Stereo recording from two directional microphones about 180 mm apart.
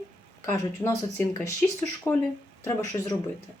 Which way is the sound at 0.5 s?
15° left (ahead or behind).